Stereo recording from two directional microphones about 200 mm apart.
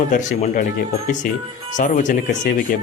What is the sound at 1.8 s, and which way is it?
Speech, 40° left (ahead or behind).